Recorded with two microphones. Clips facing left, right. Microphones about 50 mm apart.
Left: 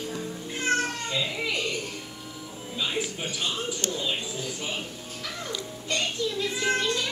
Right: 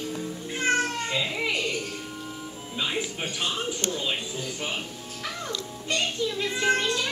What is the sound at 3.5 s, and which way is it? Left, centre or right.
Speech, right.